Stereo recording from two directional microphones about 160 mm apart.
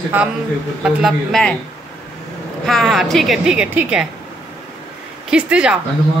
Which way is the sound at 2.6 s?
Centre (ahead or behind).